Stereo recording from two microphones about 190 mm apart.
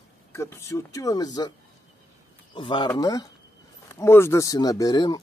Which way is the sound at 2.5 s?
25° left (ahead or behind).